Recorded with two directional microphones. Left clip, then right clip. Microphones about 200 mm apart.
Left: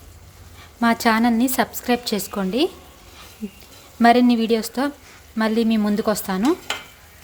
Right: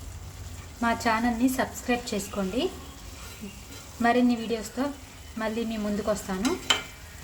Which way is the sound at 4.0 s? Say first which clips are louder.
Left 9 dB; 50° left (ahead or behind).